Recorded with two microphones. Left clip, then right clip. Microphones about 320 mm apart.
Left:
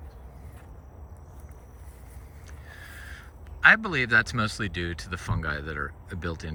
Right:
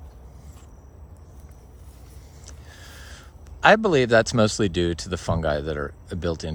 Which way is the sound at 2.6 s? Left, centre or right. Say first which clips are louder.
Left 2 dB; centre.